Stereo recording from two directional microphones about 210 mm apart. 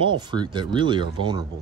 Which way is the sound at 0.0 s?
20° right (ahead or behind).